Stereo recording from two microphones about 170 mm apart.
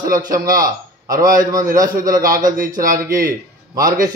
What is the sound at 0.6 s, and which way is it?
Speech, 20° right (ahead or behind).